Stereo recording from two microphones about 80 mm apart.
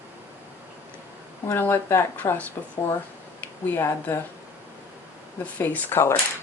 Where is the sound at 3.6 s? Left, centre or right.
Left.